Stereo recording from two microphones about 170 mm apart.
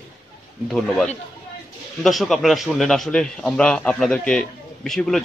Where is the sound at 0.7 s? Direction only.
5° left (ahead or behind).